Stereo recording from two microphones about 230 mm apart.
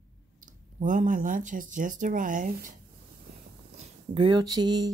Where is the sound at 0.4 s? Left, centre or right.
Right.